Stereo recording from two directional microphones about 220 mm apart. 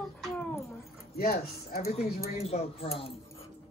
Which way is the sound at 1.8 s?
30° left (ahead or behind).